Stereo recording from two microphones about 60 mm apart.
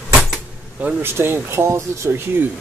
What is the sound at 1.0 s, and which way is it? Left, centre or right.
Speech, right.